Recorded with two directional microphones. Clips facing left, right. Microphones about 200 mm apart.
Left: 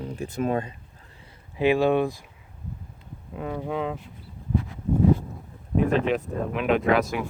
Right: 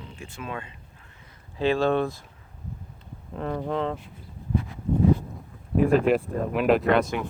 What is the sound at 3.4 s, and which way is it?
Speech, 5° left (ahead or behind).